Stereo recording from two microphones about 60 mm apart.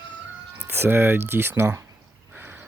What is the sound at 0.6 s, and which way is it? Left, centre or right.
Speech, right.